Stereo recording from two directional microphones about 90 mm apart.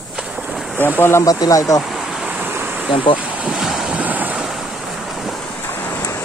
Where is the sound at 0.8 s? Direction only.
25° left (ahead or behind).